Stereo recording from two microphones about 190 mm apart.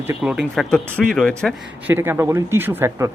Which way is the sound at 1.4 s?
10° right (ahead or behind).